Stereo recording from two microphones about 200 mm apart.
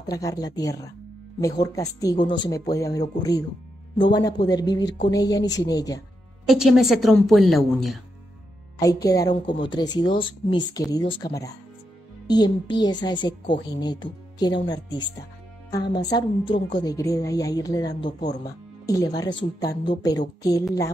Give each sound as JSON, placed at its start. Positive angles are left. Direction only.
{"t": 0.0, "sound": "a woman's voice", "side_deg": 15}
{"t": 6.5, "sound": "a woman's voice", "side_deg": 0}
{"t": 8.7, "sound": "a woman's voice", "side_deg": 15}